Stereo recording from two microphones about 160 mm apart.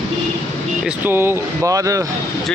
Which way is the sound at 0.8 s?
15° right (ahead or behind).